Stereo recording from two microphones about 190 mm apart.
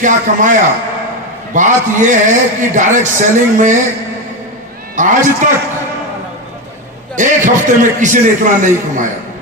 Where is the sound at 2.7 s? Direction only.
40° right (ahead or behind).